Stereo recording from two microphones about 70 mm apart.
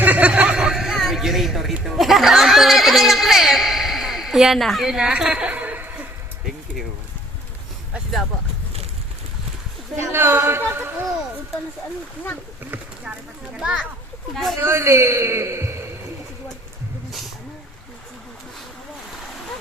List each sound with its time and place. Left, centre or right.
0.0 s a sound: right
10.1 s a man's voice: right
13.1 s a child's voice: centre
14.6 s a man's voice: right